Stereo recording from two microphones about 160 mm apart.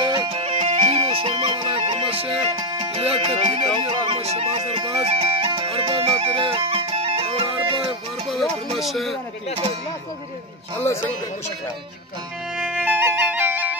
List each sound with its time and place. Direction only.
0.0 s music: 30° right (ahead or behind)
0.6 s music: 50° right (ahead or behind)
0.9 s music: 35° right (ahead or behind)
2.9 s music: 40° right (ahead or behind)
8.7 s a man's voice: centre (ahead or behind)
12.5 s music: 5° right (ahead or behind)